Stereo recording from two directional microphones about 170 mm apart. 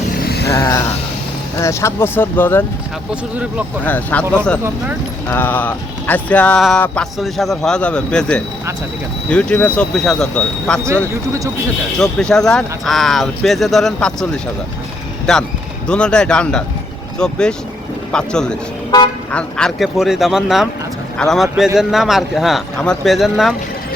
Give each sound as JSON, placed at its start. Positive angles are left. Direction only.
{"t": 0.2, "sound": "vehicle", "side_deg": 65}
{"t": 0.5, "sound": "a sound", "side_deg": 20}
{"t": 1.5, "sound": "speech", "side_deg": 15}
{"t": 3.8, "sound": "speech", "side_deg": 10}
{"t": 5.3, "sound": "speech", "side_deg": 10}
{"t": 11.9, "sound": "speech", "side_deg": 5}
{"t": 15.3, "sound": "speech", "side_deg": 5}